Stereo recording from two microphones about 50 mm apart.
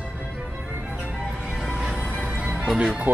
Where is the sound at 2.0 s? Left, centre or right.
Centre.